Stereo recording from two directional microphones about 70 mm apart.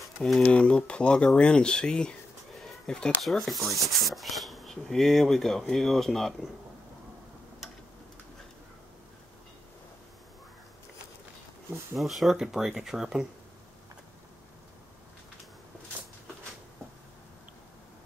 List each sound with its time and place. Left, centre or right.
0.5 s speech: centre
11.9 s speech: centre